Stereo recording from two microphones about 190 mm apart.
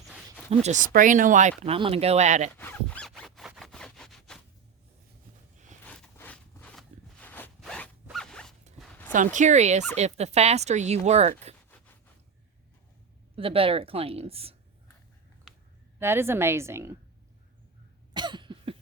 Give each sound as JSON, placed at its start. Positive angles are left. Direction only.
{"t": 0.6, "sound": "speech", "side_deg": -40}
{"t": 2.6, "sound": "zipper", "side_deg": 10}
{"t": 5.8, "sound": "zipper", "side_deg": 5}
{"t": 8.8, "sound": "a sound", "side_deg": 10}
{"t": 9.1, "sound": "speech", "side_deg": -40}
{"t": 13.3, "sound": "a woman's voice", "side_deg": -30}
{"t": 15.5, "sound": "a sound", "side_deg": 0}
{"t": 16.0, "sound": "a woman's voice", "side_deg": -10}
{"t": 18.1, "sound": "cough", "side_deg": -25}